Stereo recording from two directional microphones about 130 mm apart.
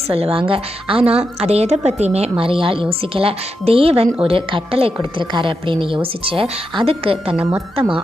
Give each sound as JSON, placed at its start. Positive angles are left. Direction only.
{"t": 0.1, "sound": "a woman's voice", "side_deg": -50}
{"t": 2.4, "sound": "a woman's voice", "side_deg": -45}